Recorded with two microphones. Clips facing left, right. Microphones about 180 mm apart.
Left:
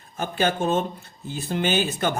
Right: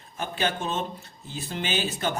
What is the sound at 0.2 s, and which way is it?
Speech, 45° left (ahead or behind).